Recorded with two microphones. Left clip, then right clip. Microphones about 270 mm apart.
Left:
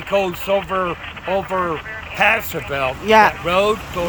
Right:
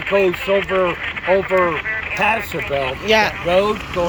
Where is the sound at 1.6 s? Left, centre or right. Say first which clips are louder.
Right 5 dB; right.